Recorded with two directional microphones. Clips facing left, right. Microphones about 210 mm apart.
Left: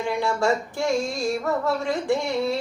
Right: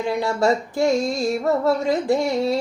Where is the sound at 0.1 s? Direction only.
40° right (ahead or behind).